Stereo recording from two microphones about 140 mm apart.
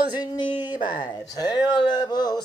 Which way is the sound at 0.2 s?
30° left (ahead or behind).